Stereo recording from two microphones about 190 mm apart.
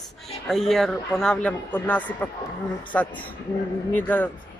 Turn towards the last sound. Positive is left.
turn(degrees=10)  # may be behind; listen again after turning